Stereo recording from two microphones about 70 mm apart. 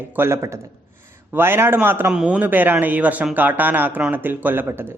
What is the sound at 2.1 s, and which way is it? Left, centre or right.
Speech, centre.